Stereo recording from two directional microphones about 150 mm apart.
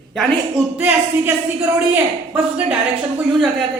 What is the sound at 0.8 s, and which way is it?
Speech, 10° right (ahead or behind).